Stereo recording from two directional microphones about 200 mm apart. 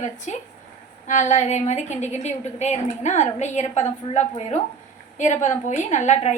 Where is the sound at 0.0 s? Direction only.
35° left (ahead or behind).